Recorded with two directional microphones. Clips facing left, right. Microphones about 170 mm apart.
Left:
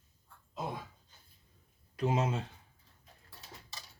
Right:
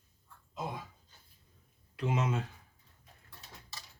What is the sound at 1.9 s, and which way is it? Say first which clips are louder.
Speech: left 1 dB; 35° left (ahead or behind).